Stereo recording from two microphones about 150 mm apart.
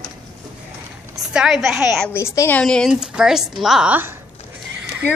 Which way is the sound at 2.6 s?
5° left (ahead or behind).